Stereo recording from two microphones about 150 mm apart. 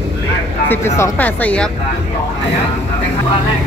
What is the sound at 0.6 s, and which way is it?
Speech, 15° left (ahead or behind).